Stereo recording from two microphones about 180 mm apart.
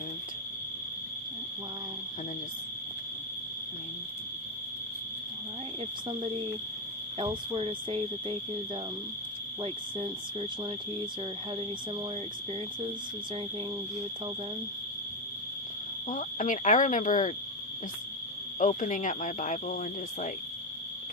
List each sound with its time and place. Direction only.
7.2 s speech: 30° right (ahead or behind)
16.0 s speech: 40° left (ahead or behind)
18.6 s speech: 45° left (ahead or behind)